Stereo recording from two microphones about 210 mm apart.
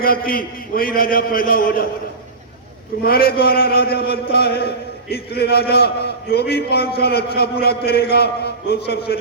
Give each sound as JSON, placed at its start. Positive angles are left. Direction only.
{"t": 0.0, "sound": "a man's voice", "side_deg": 45}
{"t": 3.0, "sound": "a man's voice", "side_deg": 45}